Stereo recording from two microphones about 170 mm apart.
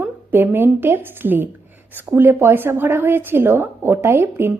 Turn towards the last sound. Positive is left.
turn(degrees=-10)  # may be behind; listen again after turning